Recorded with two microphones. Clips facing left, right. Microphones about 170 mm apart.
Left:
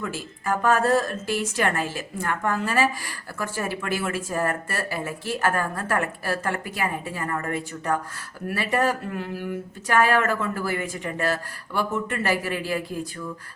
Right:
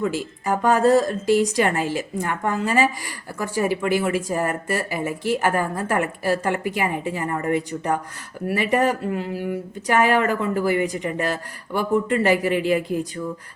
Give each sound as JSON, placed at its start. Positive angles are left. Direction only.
{"t": 0.0, "sound": "speech", "side_deg": -15}